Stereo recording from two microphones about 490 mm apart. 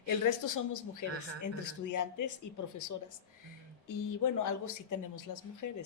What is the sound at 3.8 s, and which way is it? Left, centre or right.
Speech, left.